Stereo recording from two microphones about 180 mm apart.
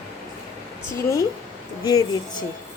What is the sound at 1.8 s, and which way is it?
Speech, 20° left (ahead or behind).